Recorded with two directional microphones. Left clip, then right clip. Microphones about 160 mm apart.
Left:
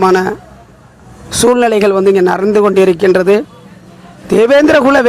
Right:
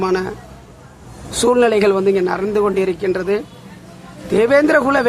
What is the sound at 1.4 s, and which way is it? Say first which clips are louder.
A man's voice: left 4 dB; 45° left (ahead or behind).